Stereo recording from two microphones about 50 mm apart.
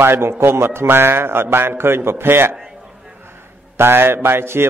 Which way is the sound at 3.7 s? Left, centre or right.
Right.